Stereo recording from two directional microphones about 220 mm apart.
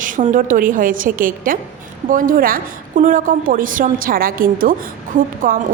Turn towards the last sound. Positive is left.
turn(degrees=-40)  # may be behind; listen again after turning